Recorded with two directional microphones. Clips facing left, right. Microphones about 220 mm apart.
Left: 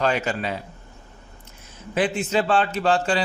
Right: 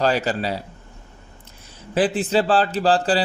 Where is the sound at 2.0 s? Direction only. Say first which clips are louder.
Right 3 dB; 35° right (ahead or behind).